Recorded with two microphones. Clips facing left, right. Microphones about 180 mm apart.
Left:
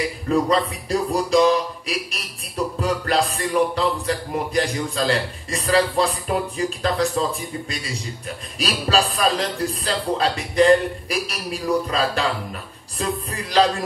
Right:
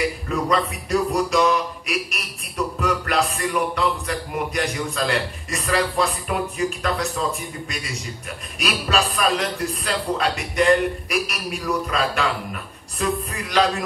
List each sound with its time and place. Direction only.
0.3 s speech: 30° left (ahead or behind)